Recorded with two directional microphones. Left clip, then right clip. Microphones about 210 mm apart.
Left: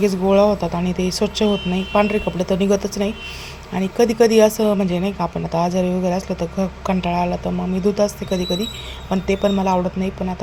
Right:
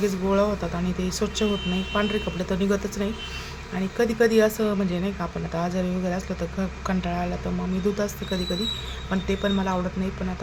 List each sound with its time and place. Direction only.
0.0 s speech: 25° left (ahead or behind)